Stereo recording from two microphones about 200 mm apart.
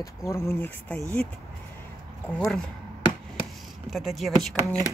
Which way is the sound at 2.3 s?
5° left (ahead or behind).